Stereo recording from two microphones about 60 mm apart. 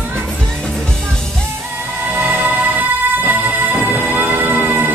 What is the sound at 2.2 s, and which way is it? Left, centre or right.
Music, right.